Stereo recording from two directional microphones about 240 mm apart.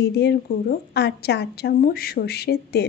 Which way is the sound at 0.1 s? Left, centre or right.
Left.